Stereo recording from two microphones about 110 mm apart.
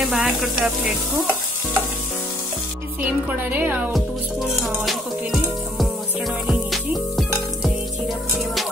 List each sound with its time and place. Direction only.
0.0 s frying: centre (ahead or behind)
3.0 s a woman's voice: 15° right (ahead or behind)
3.9 s music: centre (ahead or behind)